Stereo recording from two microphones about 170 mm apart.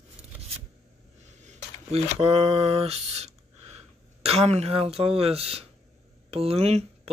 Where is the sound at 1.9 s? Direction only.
40° right (ahead or behind).